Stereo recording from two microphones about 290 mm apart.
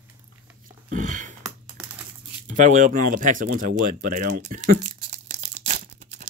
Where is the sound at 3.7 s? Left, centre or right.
Right.